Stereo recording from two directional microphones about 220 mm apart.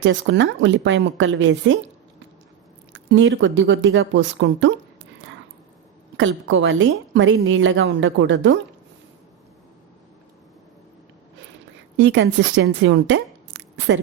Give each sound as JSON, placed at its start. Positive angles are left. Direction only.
{"t": 0.0, "sound": "a woman's voice", "side_deg": -55}
{"t": 6.1, "sound": "a woman's voice", "side_deg": -60}
{"t": 11.9, "sound": "a woman's voice", "side_deg": -55}
{"t": 13.5, "sound": "a sound", "side_deg": -55}